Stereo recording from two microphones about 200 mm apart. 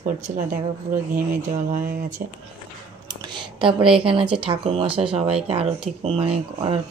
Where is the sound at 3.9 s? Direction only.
25° right (ahead or behind).